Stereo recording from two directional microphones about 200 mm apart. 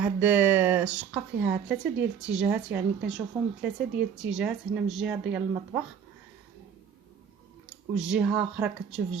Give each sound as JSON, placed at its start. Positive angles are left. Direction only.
{"t": 0.0, "sound": "a woman's voice", "side_deg": -10}
{"t": 7.9, "sound": "a woman's voice", "side_deg": -5}